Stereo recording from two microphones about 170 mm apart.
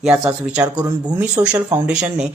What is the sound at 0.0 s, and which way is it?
Speech, 5° right (ahead or behind).